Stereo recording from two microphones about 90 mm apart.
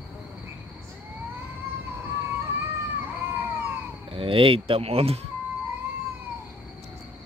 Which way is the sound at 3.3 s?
20° right (ahead or behind).